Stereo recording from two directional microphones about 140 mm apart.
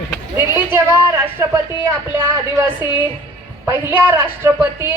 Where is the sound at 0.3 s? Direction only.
15° right (ahead or behind).